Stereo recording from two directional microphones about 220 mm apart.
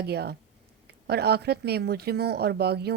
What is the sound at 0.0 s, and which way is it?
Speech, 45° right (ahead or behind).